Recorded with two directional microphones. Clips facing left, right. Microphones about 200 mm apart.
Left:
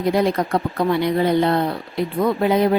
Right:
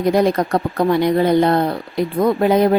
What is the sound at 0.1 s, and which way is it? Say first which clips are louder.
Speech: right 3 dB; 45° right (ahead or behind).